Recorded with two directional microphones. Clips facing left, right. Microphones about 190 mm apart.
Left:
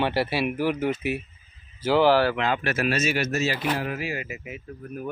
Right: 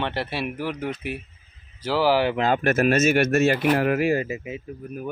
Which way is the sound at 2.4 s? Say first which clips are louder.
Right 5 dB; 45° right (ahead or behind).